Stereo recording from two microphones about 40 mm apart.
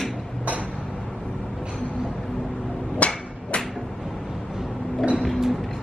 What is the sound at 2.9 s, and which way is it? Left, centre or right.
Hammer, left.